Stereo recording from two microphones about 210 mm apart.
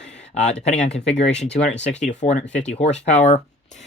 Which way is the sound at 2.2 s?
35° left (ahead or behind).